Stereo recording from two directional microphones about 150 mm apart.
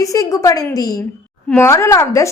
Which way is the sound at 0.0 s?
20° left (ahead or behind).